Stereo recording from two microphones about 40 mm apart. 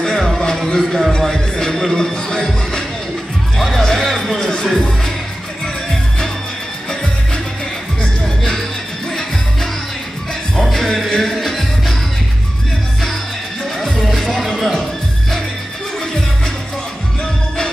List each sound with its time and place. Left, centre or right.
0.0 s music: centre
3.5 s music: centre
10.6 s music: centre
13.7 s music: centre